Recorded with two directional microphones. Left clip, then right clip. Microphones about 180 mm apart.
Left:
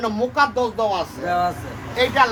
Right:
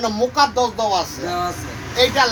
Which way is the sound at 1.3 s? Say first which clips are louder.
Left 3 dB; 25° left (ahead or behind).